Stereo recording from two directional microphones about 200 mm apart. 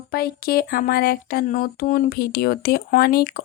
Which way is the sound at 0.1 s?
50° left (ahead or behind).